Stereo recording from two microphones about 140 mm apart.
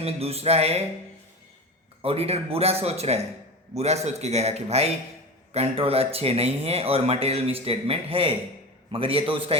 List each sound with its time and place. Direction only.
0.0 s speech: 45° right (ahead or behind)
2.0 s a man's voice: 45° right (ahead or behind)